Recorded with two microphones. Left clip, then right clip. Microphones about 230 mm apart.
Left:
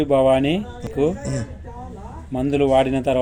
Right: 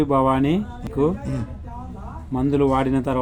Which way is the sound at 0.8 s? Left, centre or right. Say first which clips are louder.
Left 2 dB; centre.